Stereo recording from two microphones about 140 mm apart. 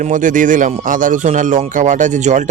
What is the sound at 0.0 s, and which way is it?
Speech, 65° right (ahead or behind).